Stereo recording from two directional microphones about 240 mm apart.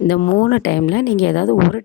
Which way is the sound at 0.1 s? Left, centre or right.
Left.